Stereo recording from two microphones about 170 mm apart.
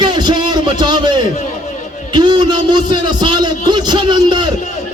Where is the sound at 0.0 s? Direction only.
25° right (ahead or behind).